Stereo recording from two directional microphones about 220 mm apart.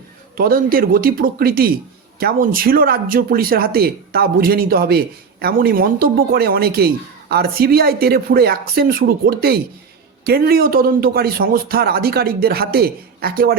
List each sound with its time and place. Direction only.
0.3 s speech: 40° right (ahead or behind)